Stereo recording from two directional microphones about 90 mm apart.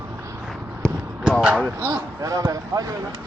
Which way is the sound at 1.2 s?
10° right (ahead or behind).